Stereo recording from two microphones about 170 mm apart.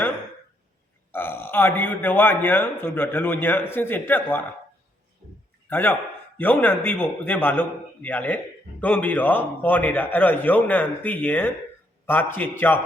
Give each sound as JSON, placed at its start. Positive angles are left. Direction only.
{"t": 1.1, "sound": "a man's voice", "side_deg": 10}
{"t": 5.6, "sound": "a man's voice", "side_deg": 10}